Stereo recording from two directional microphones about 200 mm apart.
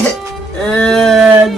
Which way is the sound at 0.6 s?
5° left (ahead or behind).